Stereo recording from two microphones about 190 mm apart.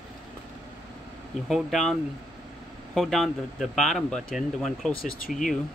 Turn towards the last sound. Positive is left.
turn(degrees=50)  # may be behind; listen again after turning